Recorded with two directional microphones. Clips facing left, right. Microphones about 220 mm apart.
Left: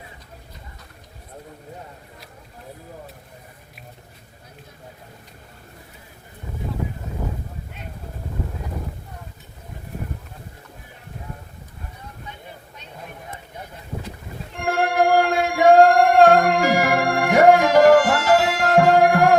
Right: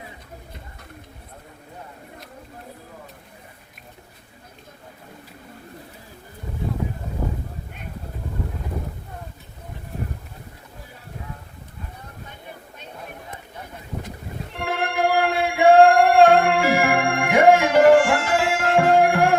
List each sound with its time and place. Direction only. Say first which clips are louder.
14.5 s music: left 4 dB; 45° left (ahead or behind)